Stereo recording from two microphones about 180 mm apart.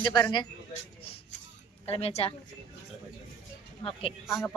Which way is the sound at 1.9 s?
35° left (ahead or behind).